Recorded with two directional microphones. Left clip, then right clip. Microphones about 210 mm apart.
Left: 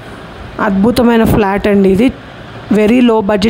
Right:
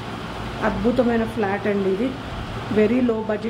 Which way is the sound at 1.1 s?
50° left (ahead or behind).